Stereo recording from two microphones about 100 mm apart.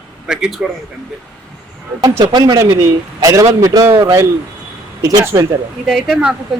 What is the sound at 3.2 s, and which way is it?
A man's voice, 35° right (ahead or behind).